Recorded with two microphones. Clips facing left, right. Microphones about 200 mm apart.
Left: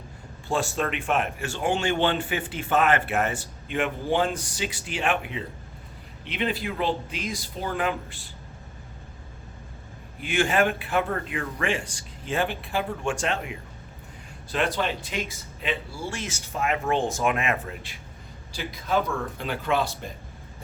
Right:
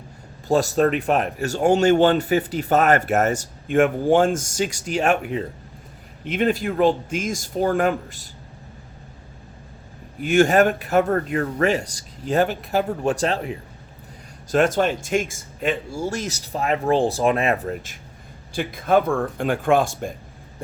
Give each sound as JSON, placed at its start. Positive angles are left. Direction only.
{"t": 0.4, "sound": "speech", "side_deg": -40}
{"t": 10.2, "sound": "speech", "side_deg": -45}
{"t": 18.5, "sound": "speech", "side_deg": -55}